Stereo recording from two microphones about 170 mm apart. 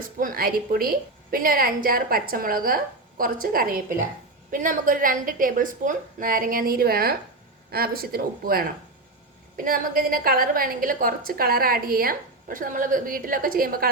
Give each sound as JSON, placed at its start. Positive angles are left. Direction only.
{"t": 0.2, "sound": "a woman's voice", "side_deg": -55}
{"t": 9.6, "sound": "a woman's voice", "side_deg": -55}